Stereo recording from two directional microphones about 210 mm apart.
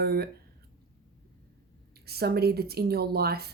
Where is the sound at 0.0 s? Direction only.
50° right (ahead or behind).